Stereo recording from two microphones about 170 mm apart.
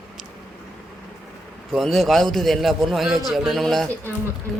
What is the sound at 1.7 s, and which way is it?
A man's voice, centre (ahead or behind).